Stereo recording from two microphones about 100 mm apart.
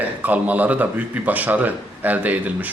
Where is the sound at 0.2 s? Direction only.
15° right (ahead or behind).